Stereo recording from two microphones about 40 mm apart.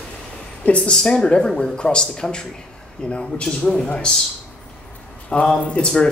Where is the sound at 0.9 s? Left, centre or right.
Centre.